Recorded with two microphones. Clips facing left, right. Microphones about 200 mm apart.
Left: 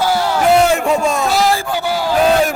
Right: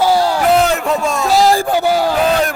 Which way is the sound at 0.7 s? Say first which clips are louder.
Left 2 dB; centre (ahead or behind).